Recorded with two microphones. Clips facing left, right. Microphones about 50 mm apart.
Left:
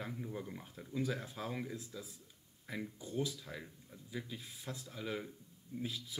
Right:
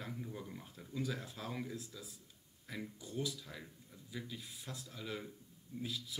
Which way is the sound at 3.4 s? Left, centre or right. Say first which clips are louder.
Left 3 dB; centre.